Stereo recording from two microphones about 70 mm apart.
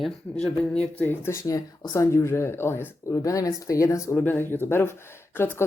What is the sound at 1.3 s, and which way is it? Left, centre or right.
Speech, left.